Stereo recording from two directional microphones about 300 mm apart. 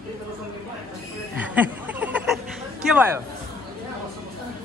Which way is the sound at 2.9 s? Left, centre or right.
Centre.